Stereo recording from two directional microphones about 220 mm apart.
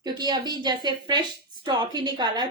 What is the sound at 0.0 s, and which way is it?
A woman's voice, 20° right (ahead or behind).